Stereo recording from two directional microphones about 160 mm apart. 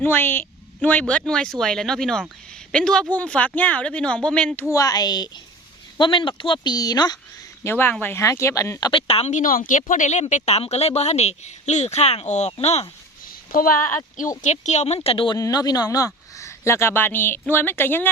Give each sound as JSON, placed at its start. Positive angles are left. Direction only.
{"t": 0.0, "sound": "a woman's voice", "side_deg": 15}
{"t": 4.7, "sound": "speech", "side_deg": 20}
{"t": 7.6, "sound": "speech", "side_deg": 15}
{"t": 8.9, "sound": "a woman's voice", "side_deg": 35}
{"t": 13.2, "sound": "a sound", "side_deg": 65}
{"t": 14.4, "sound": "a woman's voice", "side_deg": 45}
{"t": 15.4, "sound": "speech", "side_deg": 25}